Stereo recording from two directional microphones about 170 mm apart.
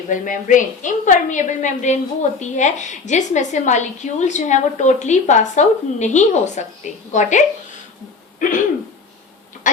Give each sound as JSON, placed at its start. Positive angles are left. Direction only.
{"t": 0.1, "sound": "a woman's voice", "side_deg": 50}
{"t": 8.4, "sound": "throat clearing", "side_deg": 50}